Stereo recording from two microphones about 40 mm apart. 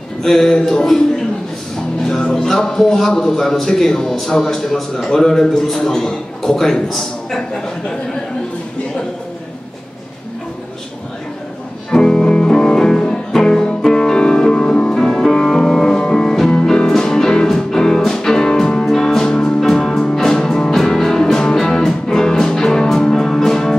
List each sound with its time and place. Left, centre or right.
0.2 s a man's voice: centre
0.6 s speech: left
1.8 s music: centre
2.4 s a man's voice: centre
11.9 s music: centre
15.2 s music: centre